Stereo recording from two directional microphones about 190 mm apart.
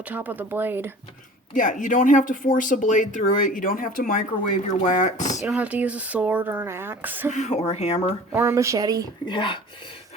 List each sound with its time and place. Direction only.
0.1 s speech: 10° right (ahead or behind)
1.5 s speech: 45° left (ahead or behind)
5.5 s speech: 5° right (ahead or behind)
7.3 s speech: 35° left (ahead or behind)
8.3 s speech: 15° right (ahead or behind)
9.2 s speech: 25° left (ahead or behind)